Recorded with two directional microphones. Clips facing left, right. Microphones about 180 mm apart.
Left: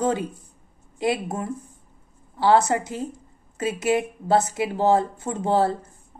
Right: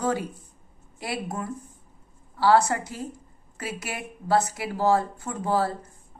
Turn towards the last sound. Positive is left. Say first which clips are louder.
# left 4 dB
turn(degrees=25)  # may be behind; listen again after turning